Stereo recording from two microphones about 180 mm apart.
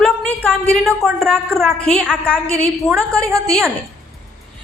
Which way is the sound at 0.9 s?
Centre (ahead or behind).